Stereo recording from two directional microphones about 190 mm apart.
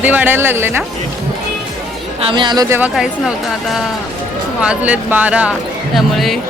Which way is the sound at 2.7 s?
5° right (ahead or behind).